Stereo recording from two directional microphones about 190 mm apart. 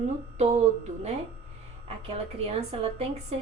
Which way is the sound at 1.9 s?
30° right (ahead or behind).